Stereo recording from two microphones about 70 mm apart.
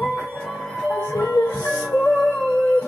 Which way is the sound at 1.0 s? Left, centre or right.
Left.